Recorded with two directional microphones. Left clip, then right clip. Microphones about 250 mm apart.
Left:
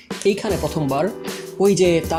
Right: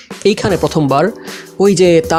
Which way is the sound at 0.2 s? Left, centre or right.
Right.